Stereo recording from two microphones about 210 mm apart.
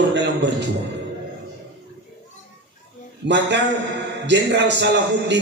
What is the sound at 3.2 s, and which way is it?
Speech, 55° right (ahead or behind).